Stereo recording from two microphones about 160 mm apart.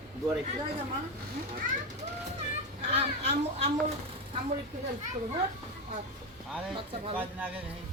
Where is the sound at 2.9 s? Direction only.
40° right (ahead or behind).